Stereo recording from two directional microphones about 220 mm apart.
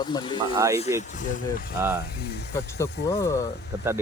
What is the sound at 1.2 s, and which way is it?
Speech, 35° left (ahead or behind).